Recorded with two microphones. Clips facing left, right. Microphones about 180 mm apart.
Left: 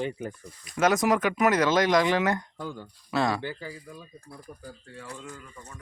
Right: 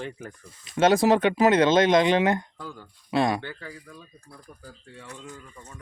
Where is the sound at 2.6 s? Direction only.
25° left (ahead or behind).